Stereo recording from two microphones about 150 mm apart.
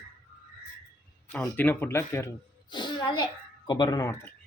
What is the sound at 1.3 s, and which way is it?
Speech, 10° left (ahead or behind).